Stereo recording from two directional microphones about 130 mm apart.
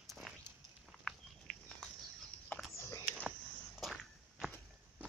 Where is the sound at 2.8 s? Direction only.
25° left (ahead or behind).